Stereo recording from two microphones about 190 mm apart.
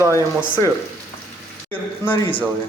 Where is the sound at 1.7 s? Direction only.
10° left (ahead or behind).